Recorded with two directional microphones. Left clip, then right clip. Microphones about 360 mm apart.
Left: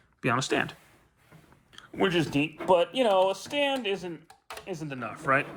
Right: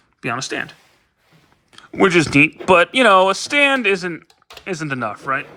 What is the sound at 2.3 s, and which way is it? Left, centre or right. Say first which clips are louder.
Speech: right 11 dB; right.